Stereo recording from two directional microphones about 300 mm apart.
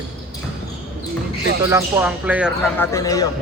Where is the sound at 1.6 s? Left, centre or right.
Centre.